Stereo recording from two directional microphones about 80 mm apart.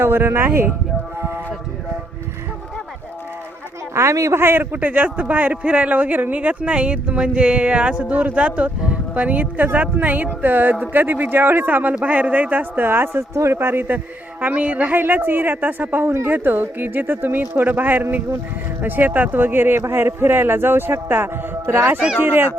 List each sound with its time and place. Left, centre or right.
0.0 s speech: right
3.9 s a man's voice: right